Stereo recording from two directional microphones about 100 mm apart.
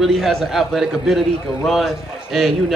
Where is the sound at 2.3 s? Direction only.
Centre (ahead or behind).